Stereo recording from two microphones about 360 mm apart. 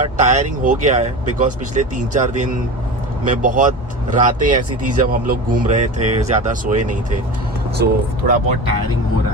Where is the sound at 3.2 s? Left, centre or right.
Right.